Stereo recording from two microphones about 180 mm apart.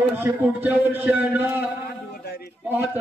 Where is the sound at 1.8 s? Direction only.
60° left (ahead or behind).